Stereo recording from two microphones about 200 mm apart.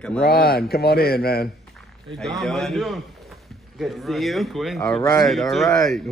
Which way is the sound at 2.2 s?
Centre (ahead or behind).